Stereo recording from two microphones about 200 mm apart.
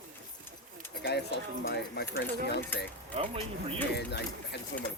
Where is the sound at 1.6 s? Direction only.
65° left (ahead or behind).